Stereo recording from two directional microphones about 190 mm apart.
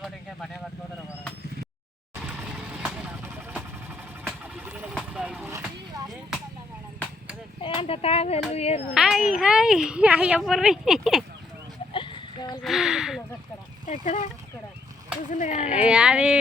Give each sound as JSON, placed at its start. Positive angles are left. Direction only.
{"t": 2.2, "sound": "vehicle", "side_deg": -5}
{"t": 4.9, "sound": "a sound", "side_deg": -5}
{"t": 7.6, "sound": "a sound", "side_deg": 30}
{"t": 8.5, "sound": "speech", "side_deg": 35}
{"t": 9.0, "sound": "speech", "side_deg": 0}
{"t": 11.9, "sound": "sheep", "side_deg": 25}
{"t": 12.6, "sound": "speech", "side_deg": 0}
{"t": 14.0, "sound": "speech", "side_deg": 40}
{"t": 15.3, "sound": "speech", "side_deg": 40}
{"t": 15.6, "sound": "speech", "side_deg": -5}